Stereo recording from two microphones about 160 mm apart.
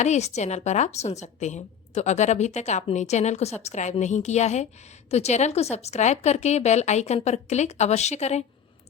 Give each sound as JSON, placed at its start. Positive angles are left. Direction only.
{"t": 0.0, "sound": "a woman's voice", "side_deg": 45}